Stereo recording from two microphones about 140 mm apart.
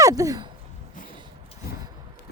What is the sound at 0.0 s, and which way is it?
Sigh, 25° right (ahead or behind).